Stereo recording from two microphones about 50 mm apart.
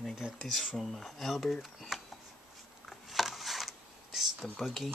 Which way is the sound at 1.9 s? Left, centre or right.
Centre.